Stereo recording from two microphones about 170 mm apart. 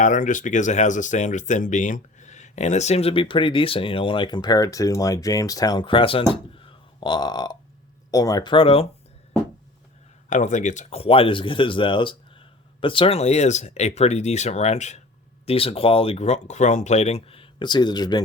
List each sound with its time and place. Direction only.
0.0 s speech: 50° left (ahead or behind); by 6.2 s 30° left (ahead or behind)
6.3 s burping: 30° left (ahead or behind)
8.1 s speech: 20° left (ahead or behind)
10.2 s speech: 45° left (ahead or behind); by 18.2 s 25° left (ahead or behind)